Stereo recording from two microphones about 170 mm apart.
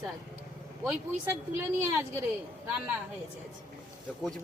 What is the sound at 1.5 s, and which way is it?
Speech, 15° right (ahead or behind).